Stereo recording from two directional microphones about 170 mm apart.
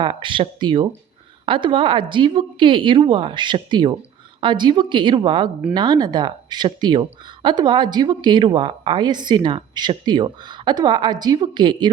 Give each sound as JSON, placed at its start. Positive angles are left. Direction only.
{"t": 0.0, "sound": "speech", "side_deg": -30}